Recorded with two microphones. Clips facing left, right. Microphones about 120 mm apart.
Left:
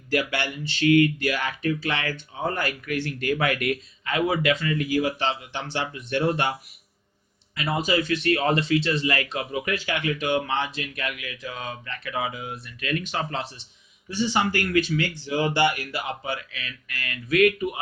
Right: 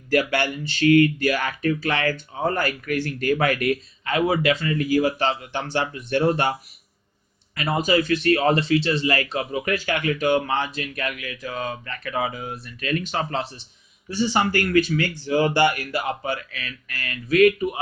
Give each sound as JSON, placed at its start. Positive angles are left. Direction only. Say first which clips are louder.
{"t": 0.1, "sound": "speech", "louder": "right 4 dB", "side_deg": -45}